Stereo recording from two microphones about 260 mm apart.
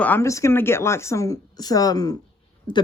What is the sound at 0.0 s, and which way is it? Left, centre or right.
Speech, centre.